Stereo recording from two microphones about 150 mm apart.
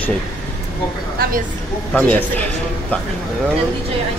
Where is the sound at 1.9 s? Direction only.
10° left (ahead or behind).